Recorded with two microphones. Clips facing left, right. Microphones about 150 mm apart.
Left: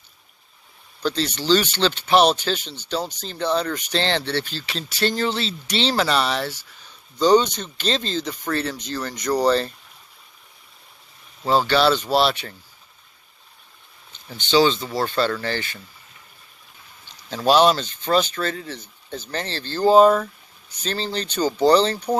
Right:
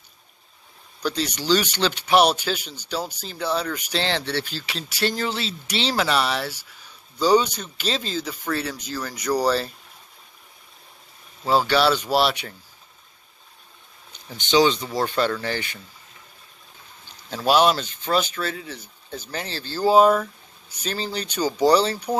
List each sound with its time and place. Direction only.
1.0 s speech: 10° right (ahead or behind)
11.4 s speech: 10° right (ahead or behind)
14.3 s speech: 15° right (ahead or behind)
17.5 s speech: 10° right (ahead or behind)